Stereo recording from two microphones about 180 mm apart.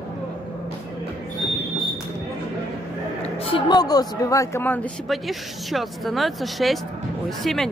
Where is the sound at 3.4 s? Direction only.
30° left (ahead or behind); by 4.8 s 10° left (ahead or behind).